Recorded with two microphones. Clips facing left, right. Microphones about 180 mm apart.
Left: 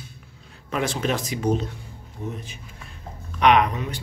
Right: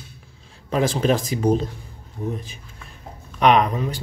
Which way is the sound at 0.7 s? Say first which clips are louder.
Right 5 dB; 35° right (ahead or behind).